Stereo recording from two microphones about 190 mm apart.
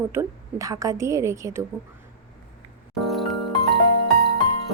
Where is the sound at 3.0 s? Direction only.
Centre (ahead or behind).